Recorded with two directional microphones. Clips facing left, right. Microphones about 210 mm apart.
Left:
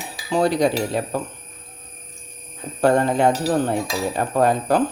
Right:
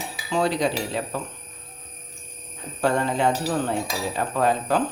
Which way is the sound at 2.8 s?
50° left (ahead or behind).